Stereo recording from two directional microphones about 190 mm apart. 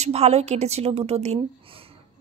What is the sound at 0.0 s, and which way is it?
A woman's voice, 35° right (ahead or behind).